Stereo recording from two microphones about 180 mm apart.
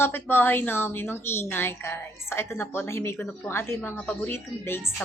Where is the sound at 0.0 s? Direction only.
10° left (ahead or behind).